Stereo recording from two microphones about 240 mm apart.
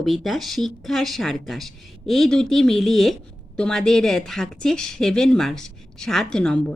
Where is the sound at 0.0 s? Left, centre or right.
Centre.